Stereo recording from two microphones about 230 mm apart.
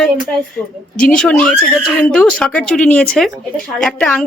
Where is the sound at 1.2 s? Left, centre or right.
Centre.